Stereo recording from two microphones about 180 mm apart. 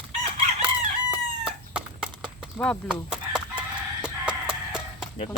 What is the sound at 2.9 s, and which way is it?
Chicken, 5° right (ahead or behind).